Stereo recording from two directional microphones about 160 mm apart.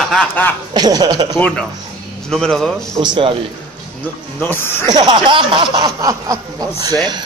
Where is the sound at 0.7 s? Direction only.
25° right (ahead or behind).